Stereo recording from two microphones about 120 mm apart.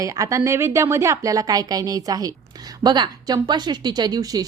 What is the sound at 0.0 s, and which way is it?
A woman's voice, 30° right (ahead or behind).